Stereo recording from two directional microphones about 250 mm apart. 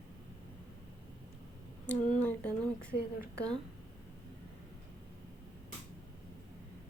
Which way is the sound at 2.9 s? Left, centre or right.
Left.